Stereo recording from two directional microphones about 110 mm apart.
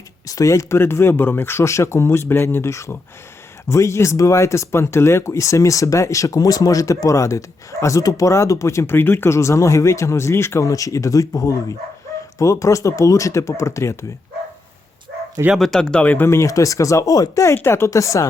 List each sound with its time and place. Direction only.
0.3 s speech: 30° left (ahead or behind)
15.5 s speech: 5° left (ahead or behind); by 18.3 s 30° left (ahead or behind)